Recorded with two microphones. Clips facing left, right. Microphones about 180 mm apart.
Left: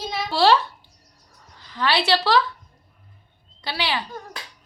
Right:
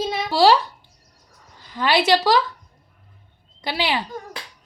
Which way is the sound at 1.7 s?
20° right (ahead or behind).